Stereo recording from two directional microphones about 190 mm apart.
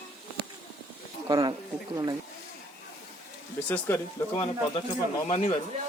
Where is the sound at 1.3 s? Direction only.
20° right (ahead or behind).